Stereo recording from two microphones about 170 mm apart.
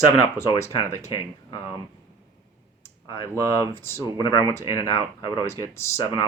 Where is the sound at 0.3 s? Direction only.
15° left (ahead or behind).